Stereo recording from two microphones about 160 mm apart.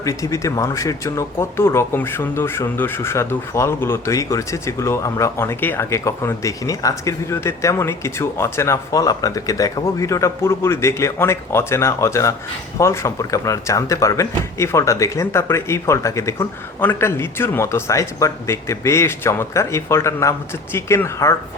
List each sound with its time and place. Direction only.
0.0 s speech: 20° left (ahead or behind)